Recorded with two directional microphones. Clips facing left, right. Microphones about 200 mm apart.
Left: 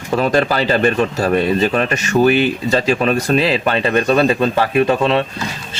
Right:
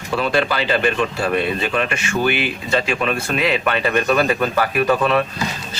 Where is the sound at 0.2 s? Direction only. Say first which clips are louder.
Left 4 dB; 40° left (ahead or behind).